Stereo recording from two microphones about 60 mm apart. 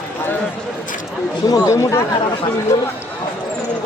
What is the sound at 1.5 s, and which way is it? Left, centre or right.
Speech, left.